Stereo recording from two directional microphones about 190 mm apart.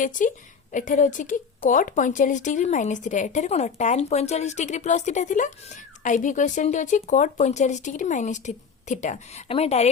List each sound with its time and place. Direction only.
0.0 s a woman's voice: 45° left (ahead or behind)